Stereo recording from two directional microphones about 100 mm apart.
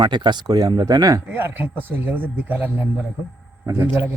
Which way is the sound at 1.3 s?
20° right (ahead or behind).